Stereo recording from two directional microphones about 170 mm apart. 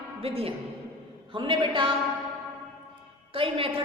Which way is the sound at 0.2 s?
35° right (ahead or behind).